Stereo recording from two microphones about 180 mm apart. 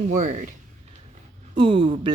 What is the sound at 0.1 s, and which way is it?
Speech, 45° right (ahead or behind).